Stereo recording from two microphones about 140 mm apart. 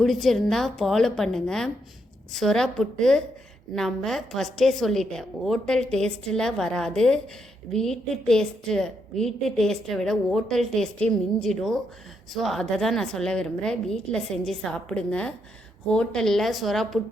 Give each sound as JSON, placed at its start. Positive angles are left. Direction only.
{"t": 0.0, "sound": "a woman's voice", "side_deg": 0}